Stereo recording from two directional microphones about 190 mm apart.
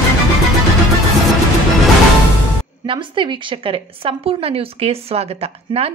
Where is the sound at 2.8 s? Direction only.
25° right (ahead or behind).